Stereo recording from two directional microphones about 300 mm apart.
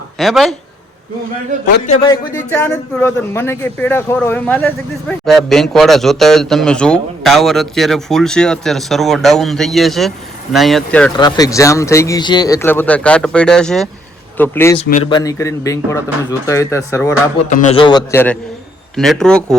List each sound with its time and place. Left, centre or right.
0.2 s a man's voice: centre
2.0 s a man's voice: centre
14.8 s speech: left
17.5 s a man's voice: left; by 19.5 s centre